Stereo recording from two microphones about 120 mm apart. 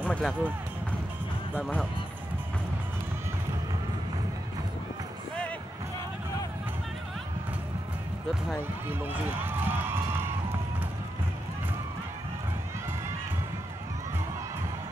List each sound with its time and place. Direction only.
0.0 s speech: 10° left (ahead or behind)
0.3 s speech: 15° right (ahead or behind)
8.8 s run: 15° right (ahead or behind)